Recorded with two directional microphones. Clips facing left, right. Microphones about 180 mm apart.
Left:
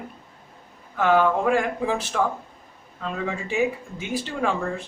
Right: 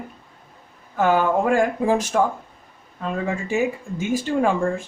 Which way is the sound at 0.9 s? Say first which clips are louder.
Right 1 dB; 45° right (ahead or behind).